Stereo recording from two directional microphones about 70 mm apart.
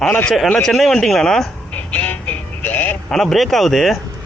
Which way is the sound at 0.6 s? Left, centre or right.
Centre.